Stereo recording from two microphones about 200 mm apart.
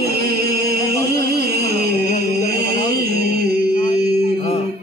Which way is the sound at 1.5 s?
50° right (ahead or behind).